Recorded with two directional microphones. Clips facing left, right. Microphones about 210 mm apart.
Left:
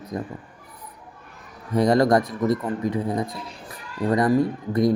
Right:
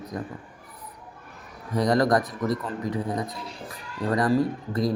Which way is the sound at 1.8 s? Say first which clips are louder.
Left 4 dB; 25° left (ahead or behind).